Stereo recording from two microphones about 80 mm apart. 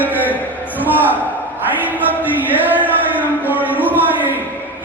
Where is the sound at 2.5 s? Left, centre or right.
Right.